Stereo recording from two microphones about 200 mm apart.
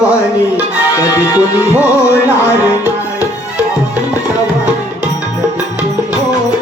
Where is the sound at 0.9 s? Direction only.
15° left (ahead or behind).